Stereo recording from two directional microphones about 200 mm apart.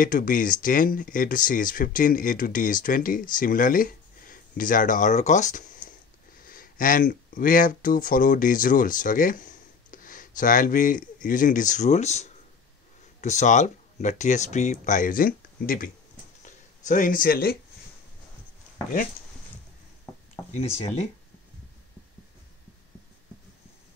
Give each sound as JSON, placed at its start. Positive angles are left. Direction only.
{"t": 0.0, "sound": "speech", "side_deg": 45}
{"t": 20.5, "sound": "speech", "side_deg": 30}